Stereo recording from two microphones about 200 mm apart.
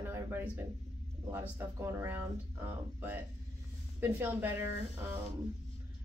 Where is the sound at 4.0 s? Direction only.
10° right (ahead or behind).